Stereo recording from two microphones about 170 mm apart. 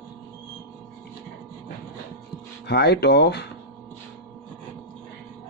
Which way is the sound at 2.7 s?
70° left (ahead or behind).